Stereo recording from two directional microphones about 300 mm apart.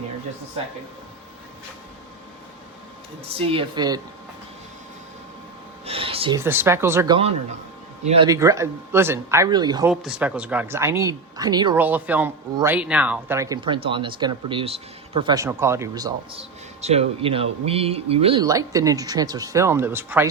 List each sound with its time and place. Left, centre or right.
3.3 s speech: centre
5.8 s speech: centre
9.9 s speech: centre